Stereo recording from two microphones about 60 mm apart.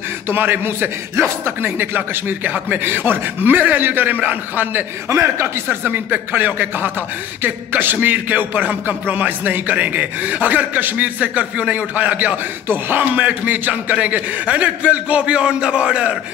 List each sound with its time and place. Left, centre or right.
0.3 s a man's voice: right
5.1 s speech: right
5.7 s a man's voice: right; by 16.2 s centre